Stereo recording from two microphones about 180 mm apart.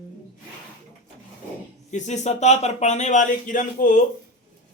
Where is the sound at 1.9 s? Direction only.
40° left (ahead or behind).